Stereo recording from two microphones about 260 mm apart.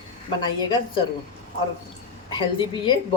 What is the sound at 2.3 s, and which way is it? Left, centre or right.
Speech, centre.